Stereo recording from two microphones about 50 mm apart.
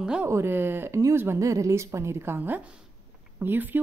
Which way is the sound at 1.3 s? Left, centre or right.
Right.